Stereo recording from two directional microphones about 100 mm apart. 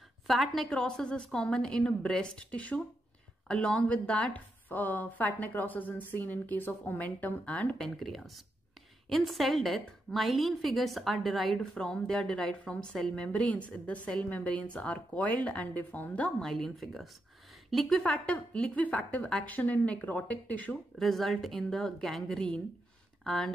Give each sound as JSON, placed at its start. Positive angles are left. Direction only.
{"t": 0.3, "sound": "a woman's voice", "side_deg": 0}
{"t": 16.3, "sound": "a woman's voice", "side_deg": 5}
{"t": 18.0, "sound": "a woman's voice", "side_deg": 15}
{"t": 21.0, "sound": "a woman's voice", "side_deg": 0}